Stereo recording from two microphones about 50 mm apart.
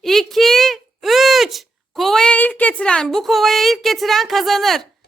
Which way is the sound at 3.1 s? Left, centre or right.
Centre.